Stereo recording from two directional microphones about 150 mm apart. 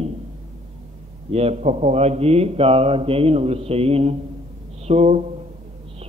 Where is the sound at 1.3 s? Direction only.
45° right (ahead or behind).